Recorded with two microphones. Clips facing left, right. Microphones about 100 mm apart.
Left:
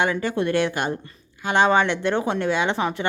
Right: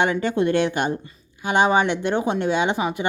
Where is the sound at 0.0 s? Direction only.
25° right (ahead or behind).